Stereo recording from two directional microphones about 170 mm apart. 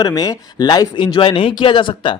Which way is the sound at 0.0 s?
20° left (ahead or behind).